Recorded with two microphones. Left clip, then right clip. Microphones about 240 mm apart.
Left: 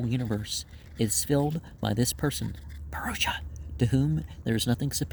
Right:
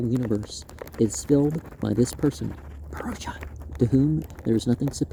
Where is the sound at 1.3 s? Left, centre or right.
Left.